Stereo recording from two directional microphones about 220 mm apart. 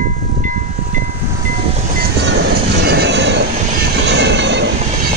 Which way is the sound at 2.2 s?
50° right (ahead or behind).